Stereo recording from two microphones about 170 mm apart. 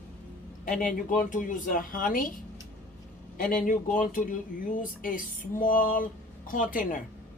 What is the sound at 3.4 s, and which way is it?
Speech, 50° left (ahead or behind).